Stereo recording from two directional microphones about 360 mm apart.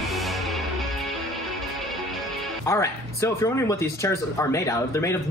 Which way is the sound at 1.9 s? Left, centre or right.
Centre.